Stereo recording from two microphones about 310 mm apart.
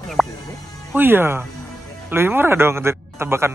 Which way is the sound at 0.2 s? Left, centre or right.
Centre.